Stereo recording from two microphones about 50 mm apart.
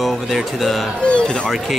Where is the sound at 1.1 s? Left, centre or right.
Centre.